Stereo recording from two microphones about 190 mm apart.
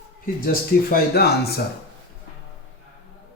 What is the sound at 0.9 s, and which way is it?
Speech, 55° left (ahead or behind).